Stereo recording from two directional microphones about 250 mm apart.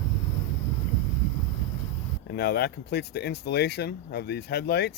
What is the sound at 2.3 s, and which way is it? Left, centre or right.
Speech, left.